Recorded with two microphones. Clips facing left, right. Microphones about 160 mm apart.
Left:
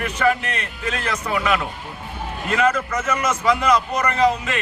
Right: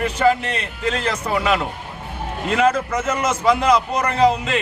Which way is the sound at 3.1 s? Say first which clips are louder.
Right 1 dB; 25° right (ahead or behind).